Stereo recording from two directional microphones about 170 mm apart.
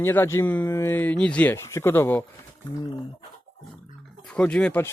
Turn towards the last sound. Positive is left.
turn(degrees=10)  # may be behind; listen again after turning